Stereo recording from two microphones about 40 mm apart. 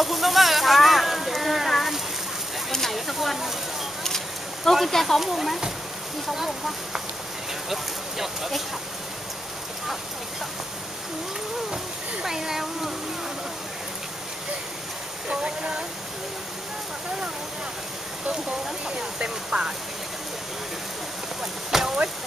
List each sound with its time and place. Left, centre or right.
0.0 s a sound: centre
4.6 s speech: centre
11.7 s speech: centre
15.2 s speech: right
18.9 s speech: right
21.4 s speech: centre